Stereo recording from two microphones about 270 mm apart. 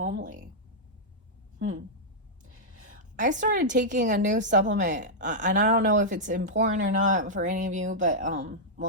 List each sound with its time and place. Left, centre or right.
0.1 s a woman's voice: right
3.0 s a woman's voice: right